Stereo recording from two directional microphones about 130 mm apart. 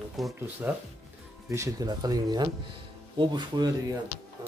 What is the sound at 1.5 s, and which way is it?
Speech, 25° right (ahead or behind).